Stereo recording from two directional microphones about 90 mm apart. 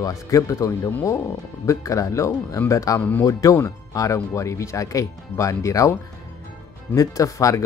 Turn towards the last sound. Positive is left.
turn(degrees=35)  # may be behind; listen again after turning